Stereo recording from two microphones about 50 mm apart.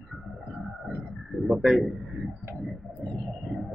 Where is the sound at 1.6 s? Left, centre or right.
Centre.